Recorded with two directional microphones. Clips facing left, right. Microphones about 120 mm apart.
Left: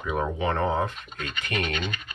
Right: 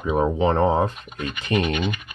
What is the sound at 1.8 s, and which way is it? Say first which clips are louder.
Speech: right 7 dB; 10° right (ahead or behind).